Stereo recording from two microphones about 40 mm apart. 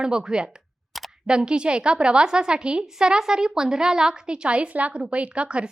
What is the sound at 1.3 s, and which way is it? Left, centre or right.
A woman's voice, right.